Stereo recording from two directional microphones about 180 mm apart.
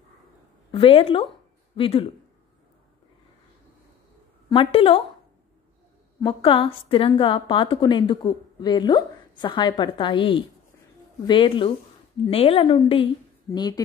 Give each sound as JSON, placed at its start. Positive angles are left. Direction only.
{"t": 0.7, "sound": "a woman's voice", "side_deg": 30}
{"t": 4.5, "sound": "a woman's voice", "side_deg": 30}
{"t": 6.2, "sound": "a woman's voice", "side_deg": 30}